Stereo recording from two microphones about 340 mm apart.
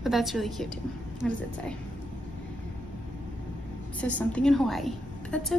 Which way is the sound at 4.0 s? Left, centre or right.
Centre.